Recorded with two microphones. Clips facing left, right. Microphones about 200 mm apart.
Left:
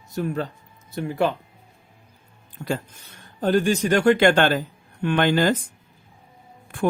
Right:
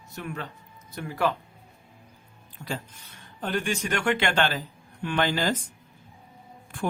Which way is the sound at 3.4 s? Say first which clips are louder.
Left 9 dB; 40° left (ahead or behind).